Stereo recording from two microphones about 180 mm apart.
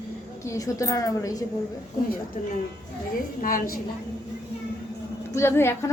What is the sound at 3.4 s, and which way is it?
Speech, 50° left (ahead or behind).